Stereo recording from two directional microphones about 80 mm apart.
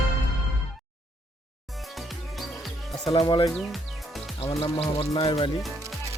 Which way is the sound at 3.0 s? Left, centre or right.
Left.